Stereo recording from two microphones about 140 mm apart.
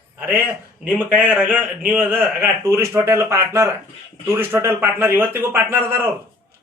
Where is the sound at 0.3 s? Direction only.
15° right (ahead or behind).